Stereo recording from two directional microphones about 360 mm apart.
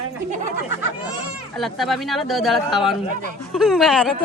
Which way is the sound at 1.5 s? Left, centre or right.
Centre.